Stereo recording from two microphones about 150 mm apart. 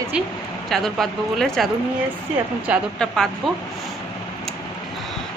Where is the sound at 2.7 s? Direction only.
10° right (ahead or behind).